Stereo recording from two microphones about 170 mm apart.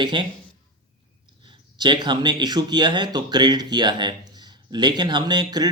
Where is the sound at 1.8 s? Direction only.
25° right (ahead or behind).